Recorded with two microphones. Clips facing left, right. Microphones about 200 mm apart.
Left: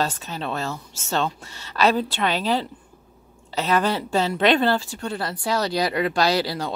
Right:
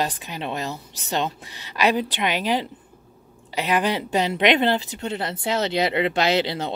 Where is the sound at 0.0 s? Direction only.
15° right (ahead or behind).